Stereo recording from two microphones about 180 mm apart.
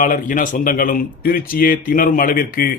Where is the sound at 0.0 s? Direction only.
50° left (ahead or behind).